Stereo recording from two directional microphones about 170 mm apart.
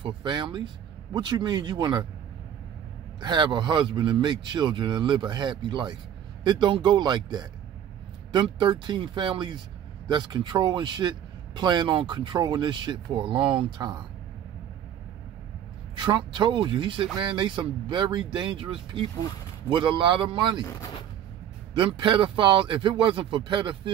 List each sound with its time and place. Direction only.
0.0 s speech: 25° right (ahead or behind)
3.2 s speech: 25° right (ahead or behind)
16.0 s speech: 30° right (ahead or behind)
21.7 s speech: 30° right (ahead or behind)